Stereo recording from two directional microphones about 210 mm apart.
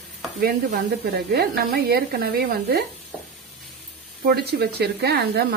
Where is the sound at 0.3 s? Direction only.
45° right (ahead or behind).